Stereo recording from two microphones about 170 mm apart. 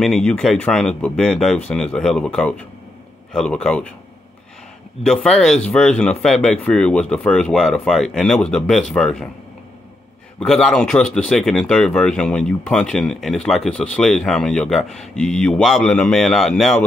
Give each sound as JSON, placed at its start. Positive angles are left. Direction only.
{"t": 0.0, "sound": "speech", "side_deg": 5}
{"t": 5.0, "sound": "speech", "side_deg": 5}
{"t": 10.4, "sound": "speech", "side_deg": 0}